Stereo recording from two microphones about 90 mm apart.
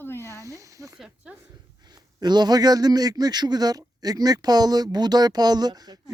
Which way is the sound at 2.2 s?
50° right (ahead or behind).